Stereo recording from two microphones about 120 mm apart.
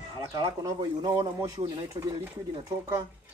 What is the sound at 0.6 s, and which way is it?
Speech, 35° right (ahead or behind).